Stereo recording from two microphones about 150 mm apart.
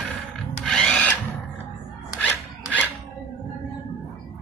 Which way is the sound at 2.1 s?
Centre (ahead or behind).